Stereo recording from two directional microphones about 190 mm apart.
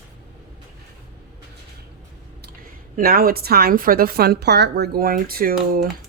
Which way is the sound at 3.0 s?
50° right (ahead or behind).